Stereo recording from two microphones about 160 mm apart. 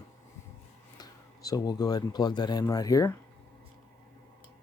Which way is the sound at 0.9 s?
25° left (ahead or behind).